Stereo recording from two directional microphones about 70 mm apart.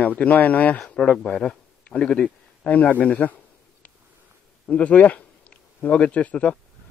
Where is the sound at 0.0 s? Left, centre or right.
Left.